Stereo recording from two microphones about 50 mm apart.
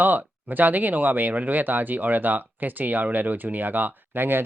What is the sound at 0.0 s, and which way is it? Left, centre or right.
Speech, right.